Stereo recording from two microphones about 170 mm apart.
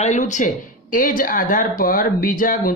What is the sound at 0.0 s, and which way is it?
Speech, 45° left (ahead or behind).